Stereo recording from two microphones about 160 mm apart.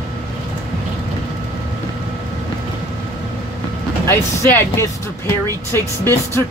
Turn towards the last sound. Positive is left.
turn(degrees=15)  # may be behind; listen again after turning